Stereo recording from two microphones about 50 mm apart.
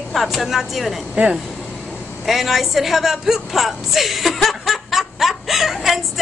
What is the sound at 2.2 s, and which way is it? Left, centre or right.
A woman's voice, centre.